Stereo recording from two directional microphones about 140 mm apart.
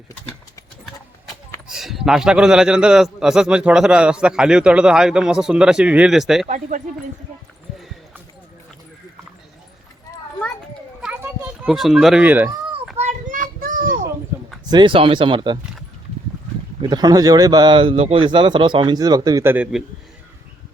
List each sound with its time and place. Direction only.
1.6 s a man's voice: 5° right (ahead or behind)
6.5 s speech: 65° right (ahead or behind)
11.0 s children playing: 10° right (ahead or behind)
11.7 s a man's voice: centre (ahead or behind)
13.0 s child singing: 60° right (ahead or behind)
13.6 s children playing: 80° right
14.3 s a sound: 20° right (ahead or behind)
14.7 s speech: 35° right (ahead or behind)
16.9 s speech: 30° right (ahead or behind)